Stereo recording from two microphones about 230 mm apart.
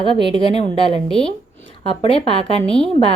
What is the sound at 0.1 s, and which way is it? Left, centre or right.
A woman's voice, left.